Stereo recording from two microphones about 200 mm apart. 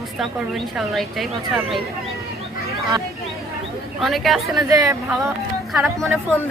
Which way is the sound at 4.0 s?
Centre (ahead or behind).